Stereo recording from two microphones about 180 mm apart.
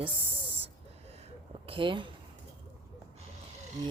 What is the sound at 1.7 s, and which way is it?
Speech, 25° right (ahead or behind).